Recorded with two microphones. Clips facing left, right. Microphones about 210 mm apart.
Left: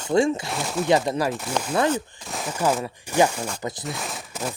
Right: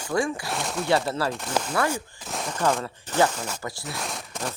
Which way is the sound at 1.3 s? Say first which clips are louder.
Left 2 dB; 5° left (ahead or behind).